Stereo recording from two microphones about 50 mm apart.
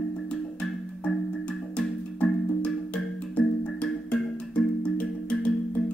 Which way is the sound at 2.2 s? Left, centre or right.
Left.